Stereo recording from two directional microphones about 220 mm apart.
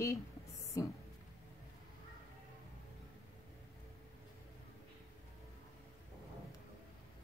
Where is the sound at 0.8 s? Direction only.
15° left (ahead or behind).